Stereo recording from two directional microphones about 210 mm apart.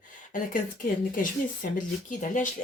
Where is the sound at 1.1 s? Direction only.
40° left (ahead or behind).